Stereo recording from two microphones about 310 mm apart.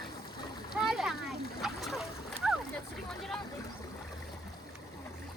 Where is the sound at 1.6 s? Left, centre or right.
Centre.